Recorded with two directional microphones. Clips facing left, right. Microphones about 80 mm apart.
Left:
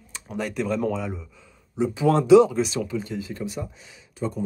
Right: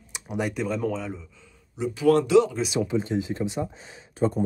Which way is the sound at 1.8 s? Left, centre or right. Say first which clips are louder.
Even; centre.